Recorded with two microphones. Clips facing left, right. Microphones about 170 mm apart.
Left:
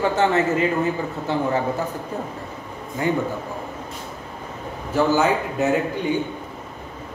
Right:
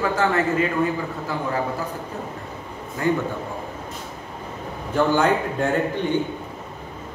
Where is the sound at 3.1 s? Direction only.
20° left (ahead or behind).